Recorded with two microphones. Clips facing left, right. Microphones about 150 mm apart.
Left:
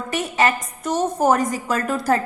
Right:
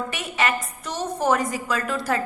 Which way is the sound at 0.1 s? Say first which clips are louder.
Left 10 dB; 40° left (ahead or behind).